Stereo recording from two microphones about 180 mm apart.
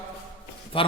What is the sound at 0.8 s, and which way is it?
Speech, 30° left (ahead or behind).